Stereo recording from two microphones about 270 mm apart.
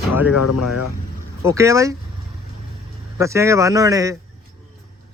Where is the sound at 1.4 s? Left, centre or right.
Centre.